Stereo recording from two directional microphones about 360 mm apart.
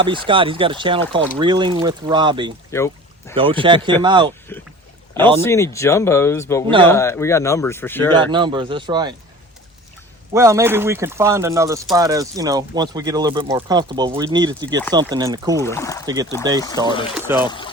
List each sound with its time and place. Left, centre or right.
0.0 s speech: centre
2.7 s a sound: centre
3.3 s speech: centre
4.5 s a man's voice: centre
8.1 s speech: centre
10.3 s speech: centre
15.5 s a man's voice: centre
16.8 s speech: centre
17.4 s a man's voice: centre